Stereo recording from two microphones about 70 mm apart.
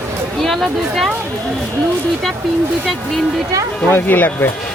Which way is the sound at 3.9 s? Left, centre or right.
Left.